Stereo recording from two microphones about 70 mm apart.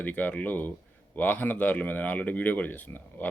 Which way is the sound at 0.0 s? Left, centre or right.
Left.